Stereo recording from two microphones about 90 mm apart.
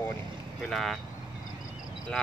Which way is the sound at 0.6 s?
5° left (ahead or behind).